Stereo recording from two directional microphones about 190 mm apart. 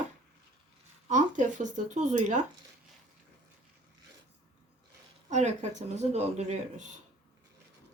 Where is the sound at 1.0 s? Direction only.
40° right (ahead or behind).